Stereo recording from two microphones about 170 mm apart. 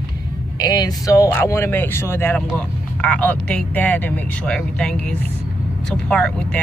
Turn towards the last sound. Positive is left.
turn(degrees=5)  # may be behind; listen again after turning